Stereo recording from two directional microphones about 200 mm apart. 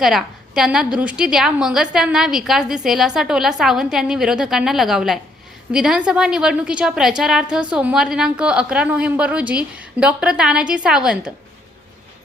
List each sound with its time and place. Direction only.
0.0 s a woman's voice: centre (ahead or behind)